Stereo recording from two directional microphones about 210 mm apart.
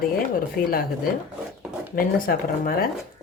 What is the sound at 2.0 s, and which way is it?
Speech, 45° left (ahead or behind).